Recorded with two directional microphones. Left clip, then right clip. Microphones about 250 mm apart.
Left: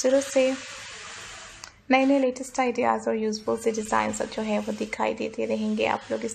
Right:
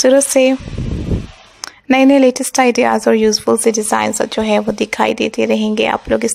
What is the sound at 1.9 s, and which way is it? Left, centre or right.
A woman's voice, right.